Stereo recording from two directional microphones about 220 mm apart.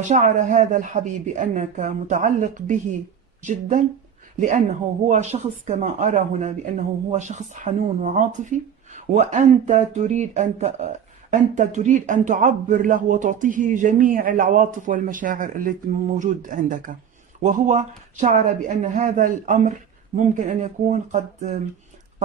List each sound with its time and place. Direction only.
0.1 s speech: 35° right (ahead or behind)